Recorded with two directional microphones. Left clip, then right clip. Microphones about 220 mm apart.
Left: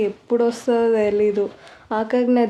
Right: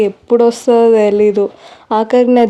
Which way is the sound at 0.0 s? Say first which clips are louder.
Right 9 dB; 40° right (ahead or behind).